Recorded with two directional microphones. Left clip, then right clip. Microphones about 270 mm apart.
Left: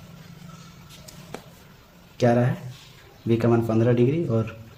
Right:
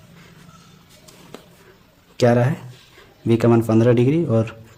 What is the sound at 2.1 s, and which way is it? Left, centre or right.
A man's voice, right.